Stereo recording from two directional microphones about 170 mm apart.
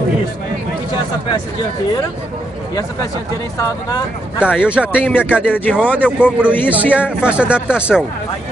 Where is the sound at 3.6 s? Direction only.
20° left (ahead or behind).